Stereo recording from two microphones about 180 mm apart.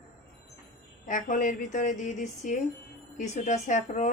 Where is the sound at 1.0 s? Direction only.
45° left (ahead or behind).